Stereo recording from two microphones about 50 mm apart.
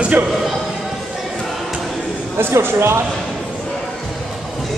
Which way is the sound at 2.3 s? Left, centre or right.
Right.